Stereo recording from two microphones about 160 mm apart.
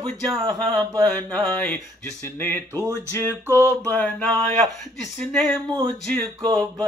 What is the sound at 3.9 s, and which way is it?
Mantra, 10° left (ahead or behind).